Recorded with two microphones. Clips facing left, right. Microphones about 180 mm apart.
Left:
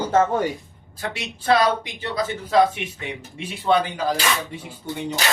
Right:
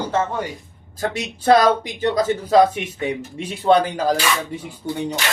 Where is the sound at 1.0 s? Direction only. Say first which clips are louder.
Right 6 dB; 45° right (ahead or behind).